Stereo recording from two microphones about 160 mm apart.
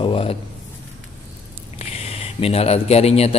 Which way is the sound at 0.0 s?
35° left (ahead or behind).